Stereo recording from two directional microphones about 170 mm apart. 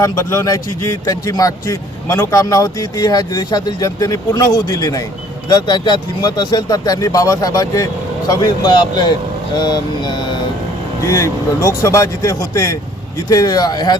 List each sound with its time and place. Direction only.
0.0 s speech: 20° left (ahead or behind)